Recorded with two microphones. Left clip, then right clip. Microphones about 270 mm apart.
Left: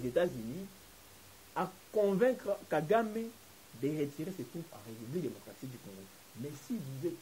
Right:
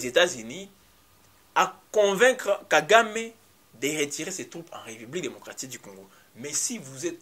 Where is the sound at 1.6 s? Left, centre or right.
Centre.